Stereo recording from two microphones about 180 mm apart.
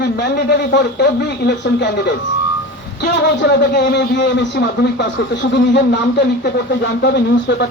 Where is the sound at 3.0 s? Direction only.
80° left.